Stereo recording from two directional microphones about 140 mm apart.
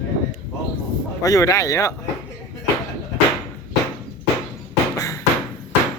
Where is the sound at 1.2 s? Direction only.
25° left (ahead or behind).